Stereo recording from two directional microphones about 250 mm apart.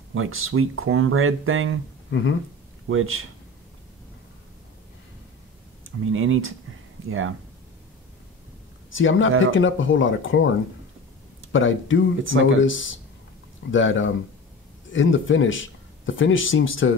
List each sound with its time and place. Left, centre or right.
0.1 s speech: right
2.9 s speech: right
5.9 s speech: right
8.9 s speech: left
11.5 s speech: left
12.2 s speech: right
12.5 s speech: left